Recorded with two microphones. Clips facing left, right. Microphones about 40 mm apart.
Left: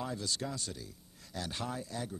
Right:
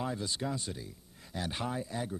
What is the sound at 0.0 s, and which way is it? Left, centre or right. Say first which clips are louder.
Speech: right 2 dB; centre.